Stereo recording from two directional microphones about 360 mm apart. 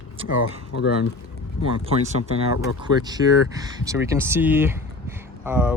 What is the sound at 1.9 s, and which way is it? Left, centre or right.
Speech, centre.